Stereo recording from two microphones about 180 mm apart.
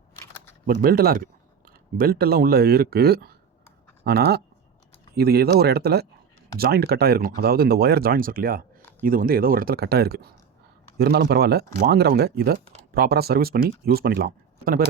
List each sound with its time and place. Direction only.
0.7 s speech: 55° right (ahead or behind)